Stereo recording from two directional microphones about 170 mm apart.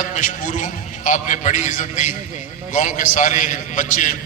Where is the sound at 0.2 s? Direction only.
50° left (ahead or behind).